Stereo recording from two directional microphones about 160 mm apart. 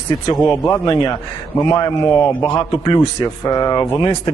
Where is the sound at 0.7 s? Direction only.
25° left (ahead or behind).